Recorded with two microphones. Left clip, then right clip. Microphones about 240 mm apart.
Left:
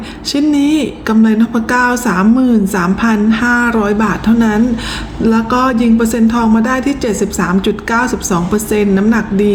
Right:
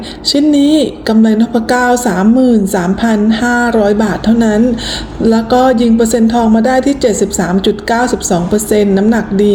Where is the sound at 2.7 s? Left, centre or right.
Centre.